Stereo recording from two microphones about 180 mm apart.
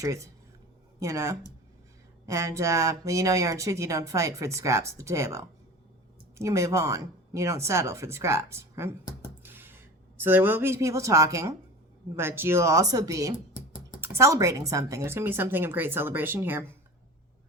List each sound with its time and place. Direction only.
0.0 s speech: 15° right (ahead or behind)